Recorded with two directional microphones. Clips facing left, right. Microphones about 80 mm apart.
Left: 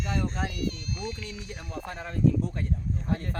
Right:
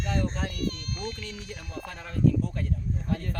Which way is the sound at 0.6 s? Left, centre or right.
Right.